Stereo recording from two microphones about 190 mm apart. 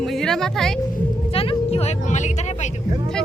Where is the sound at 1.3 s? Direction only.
30° left (ahead or behind).